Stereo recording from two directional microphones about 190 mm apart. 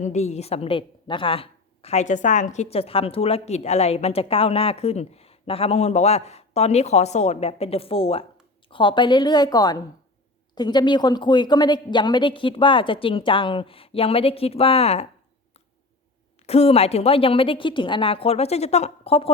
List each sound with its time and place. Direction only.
0.0 s a woman's voice: 35° left (ahead or behind)
16.4 s a woman's voice: 30° left (ahead or behind)